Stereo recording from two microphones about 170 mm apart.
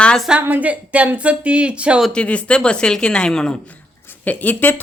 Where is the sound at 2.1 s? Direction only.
5° left (ahead or behind).